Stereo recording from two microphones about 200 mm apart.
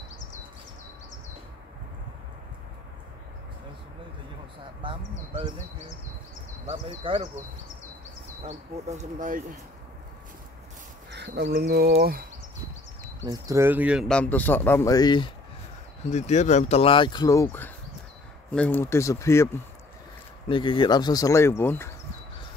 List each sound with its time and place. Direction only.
4.8 s speech: 25° right (ahead or behind)
6.7 s speech: 30° right (ahead or behind)
8.5 s speech: 35° right (ahead or behind)
11.1 s speech: 55° right (ahead or behind)
13.2 s a man's voice: 20° right (ahead or behind); by 15.3 s 20° left (ahead or behind)
16.1 s a man's voice: 35° left (ahead or behind); by 19.5 s 15° left (ahead or behind)
20.4 s speech: 25° left (ahead or behind)